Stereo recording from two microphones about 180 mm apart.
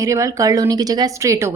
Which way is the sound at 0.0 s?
15° right (ahead or behind).